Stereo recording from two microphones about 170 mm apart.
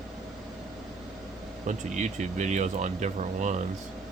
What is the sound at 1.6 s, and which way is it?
Speech, 45° right (ahead or behind).